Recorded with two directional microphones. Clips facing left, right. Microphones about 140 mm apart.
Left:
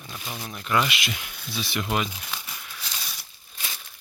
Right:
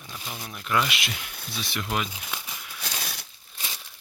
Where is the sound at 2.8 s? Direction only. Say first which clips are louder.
Right 6 dB; 65° right (ahead or behind).